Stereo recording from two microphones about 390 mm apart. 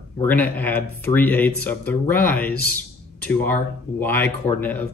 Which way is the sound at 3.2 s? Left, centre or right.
Centre.